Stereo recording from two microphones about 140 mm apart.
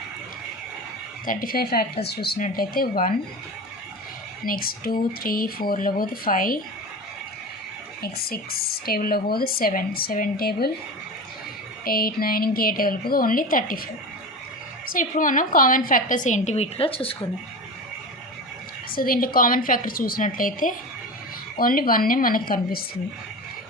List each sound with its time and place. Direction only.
1.3 s speech: 90° left
4.4 s speech: 90° left
8.0 s speech: 90° left
11.9 s speech: 90° left
14.8 s a woman's voice: 75° left (ahead or behind); by 17.2 s 40° left (ahead or behind)
18.9 s a woman's voice: 90° left; by 20.7 s 75° left (ahead or behind)
21.5 s speech: 90° left